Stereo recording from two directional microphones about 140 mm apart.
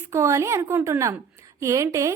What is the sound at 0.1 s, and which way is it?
A woman's voice, 20° right (ahead or behind).